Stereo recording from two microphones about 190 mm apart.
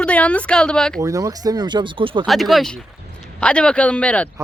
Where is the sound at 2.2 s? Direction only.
Centre (ahead or behind).